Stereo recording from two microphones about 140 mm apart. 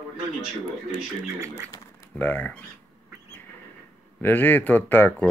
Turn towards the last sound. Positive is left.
turn(degrees=15)  # may be behind; listen again after turning